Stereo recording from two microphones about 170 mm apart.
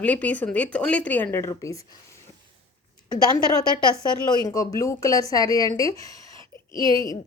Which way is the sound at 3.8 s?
25° left (ahead or behind).